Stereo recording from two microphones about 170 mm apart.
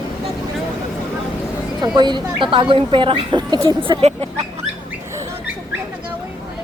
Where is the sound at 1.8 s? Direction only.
25° right (ahead or behind).